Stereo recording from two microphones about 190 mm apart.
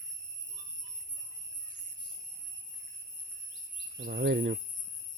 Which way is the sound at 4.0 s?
65° right (ahead or behind).